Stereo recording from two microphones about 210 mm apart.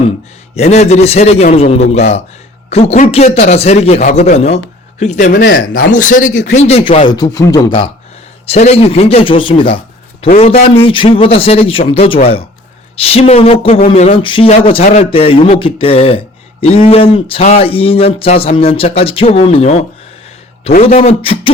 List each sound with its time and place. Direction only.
0.5 s a man's voice: 30° left (ahead or behind)
10.8 s speech: 25° left (ahead or behind)
20.8 s speech: 30° left (ahead or behind)